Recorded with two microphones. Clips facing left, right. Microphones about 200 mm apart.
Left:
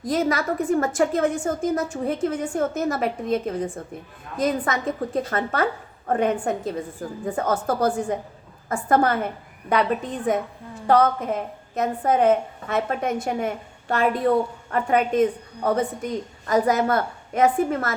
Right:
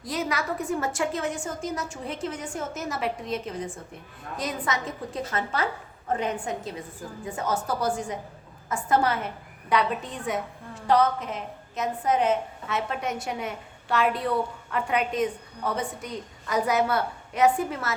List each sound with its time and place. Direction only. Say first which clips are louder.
0.1 s a woman's voice: left 6 dB; 45° left (ahead or behind)
10.8 s a woman's voice: left 4 dB; 55° left (ahead or behind)